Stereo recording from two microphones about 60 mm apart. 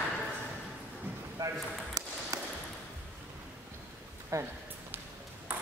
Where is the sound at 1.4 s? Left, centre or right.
Right.